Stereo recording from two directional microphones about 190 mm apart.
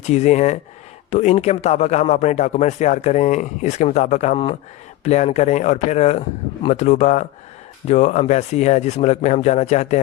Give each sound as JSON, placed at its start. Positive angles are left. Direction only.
{"t": 0.0, "sound": "speech", "side_deg": 35}